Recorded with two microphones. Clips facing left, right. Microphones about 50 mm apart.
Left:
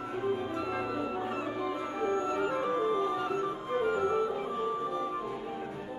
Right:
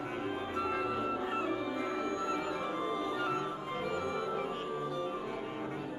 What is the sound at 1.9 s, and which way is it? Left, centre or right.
Music, left.